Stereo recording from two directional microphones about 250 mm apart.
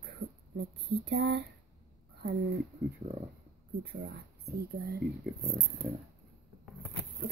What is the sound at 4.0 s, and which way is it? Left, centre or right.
A woman's voice, right.